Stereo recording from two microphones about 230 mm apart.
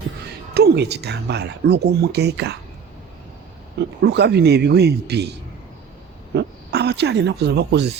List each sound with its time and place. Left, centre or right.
0.5 s speech: right
4.0 s speech: right
6.3 s speech: right